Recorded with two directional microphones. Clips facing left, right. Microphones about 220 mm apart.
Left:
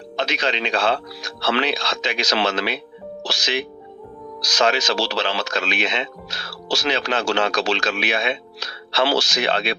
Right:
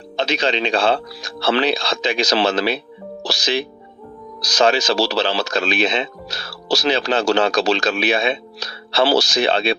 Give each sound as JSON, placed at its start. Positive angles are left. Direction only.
{"t": 0.2, "sound": "speech", "side_deg": -30}